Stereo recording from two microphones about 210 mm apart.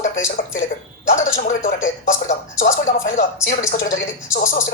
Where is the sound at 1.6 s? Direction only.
40° left (ahead or behind).